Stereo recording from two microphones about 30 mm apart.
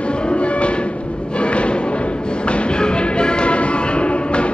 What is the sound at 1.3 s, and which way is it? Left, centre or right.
Music, left.